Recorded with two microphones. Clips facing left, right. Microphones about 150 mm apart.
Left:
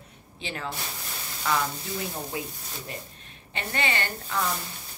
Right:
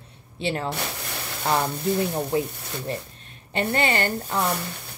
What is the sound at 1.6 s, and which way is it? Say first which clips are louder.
Speech: right 9 dB; 60° right (ahead or behind).